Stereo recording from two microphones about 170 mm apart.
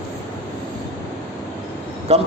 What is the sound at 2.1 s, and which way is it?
Speech, 35° right (ahead or behind).